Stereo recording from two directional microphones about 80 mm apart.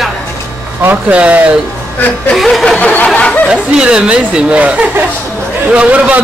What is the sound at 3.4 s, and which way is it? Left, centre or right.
A man's voice, centre.